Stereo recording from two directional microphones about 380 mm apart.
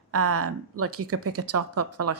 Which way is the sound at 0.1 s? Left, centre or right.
Right.